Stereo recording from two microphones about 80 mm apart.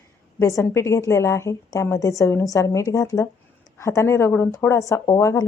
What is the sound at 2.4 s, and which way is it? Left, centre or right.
A woman's voice, left.